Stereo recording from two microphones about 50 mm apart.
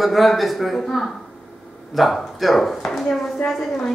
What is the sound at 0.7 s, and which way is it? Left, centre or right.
Speech, centre.